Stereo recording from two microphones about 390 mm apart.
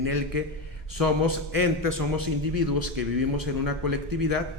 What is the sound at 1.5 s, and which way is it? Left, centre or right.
A man's voice, right.